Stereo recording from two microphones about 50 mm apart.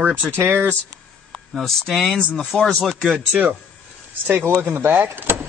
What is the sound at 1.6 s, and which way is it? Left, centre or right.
Speech, centre.